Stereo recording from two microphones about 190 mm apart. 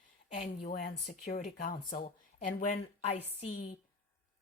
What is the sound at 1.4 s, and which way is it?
Speech, 45° left (ahead or behind).